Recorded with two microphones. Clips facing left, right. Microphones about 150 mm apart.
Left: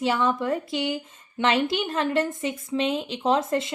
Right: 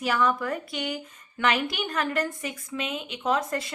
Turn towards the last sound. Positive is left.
turn(degrees=25)  # may be behind; listen again after turning